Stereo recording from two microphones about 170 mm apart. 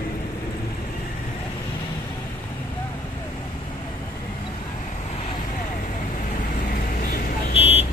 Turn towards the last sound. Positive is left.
turn(degrees=35)  # may be behind; listen again after turning